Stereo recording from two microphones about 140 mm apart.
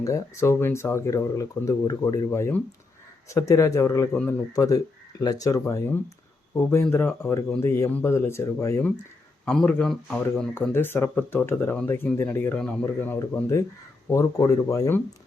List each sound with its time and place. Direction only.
0.0 s speech: 20° left (ahead or behind); by 10.2 s 5° left (ahead or behind)
10.7 s speech: 15° left (ahead or behind)